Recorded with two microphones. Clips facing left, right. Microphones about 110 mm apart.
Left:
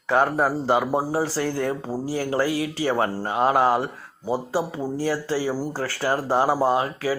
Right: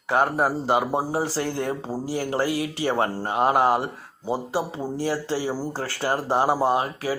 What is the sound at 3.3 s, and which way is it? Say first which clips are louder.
Speech: even; 20° right (ahead or behind).